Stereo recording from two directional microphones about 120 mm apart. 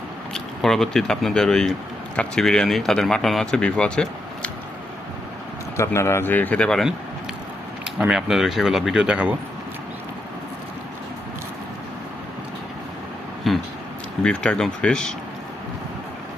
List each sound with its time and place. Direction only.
0.3 s speech: 5° left (ahead or behind)
5.7 s a man's voice: 25° left (ahead or behind); by 6.9 s 5° left (ahead or behind)
7.9 s speech: 5° right (ahead or behind)
13.5 s a sound: centre (ahead or behind)
14.2 s a man's voice: 10° left (ahead or behind)